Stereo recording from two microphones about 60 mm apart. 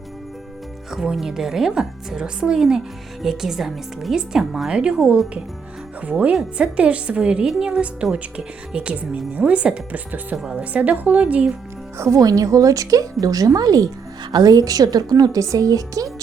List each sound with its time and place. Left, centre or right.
0.9 s a woman's voice: centre; by 10.3 s right
10.3 s a woman's voice: centre
10.6 s speech: right
11.9 s speech: right
12.2 s a woman's voice: right